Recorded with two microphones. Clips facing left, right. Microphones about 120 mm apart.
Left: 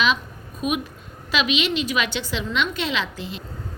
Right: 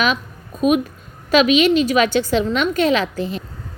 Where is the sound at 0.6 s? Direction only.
40° right (ahead or behind).